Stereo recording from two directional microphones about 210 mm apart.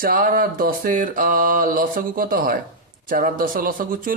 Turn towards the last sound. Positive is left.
turn(degrees=-40)  # may be behind; listen again after turning